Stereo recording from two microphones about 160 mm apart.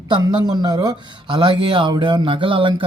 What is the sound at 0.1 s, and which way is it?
Speech, 25° right (ahead or behind).